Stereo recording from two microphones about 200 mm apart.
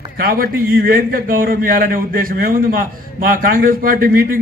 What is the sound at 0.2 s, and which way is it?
A man's voice, 45° right (ahead or behind).